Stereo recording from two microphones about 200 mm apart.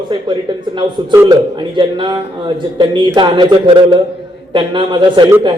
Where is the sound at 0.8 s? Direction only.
15° right (ahead or behind).